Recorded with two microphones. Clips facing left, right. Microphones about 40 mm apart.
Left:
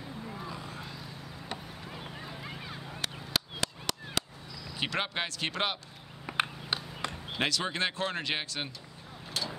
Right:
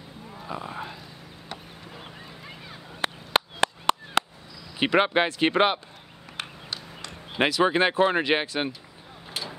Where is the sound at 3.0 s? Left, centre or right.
Right.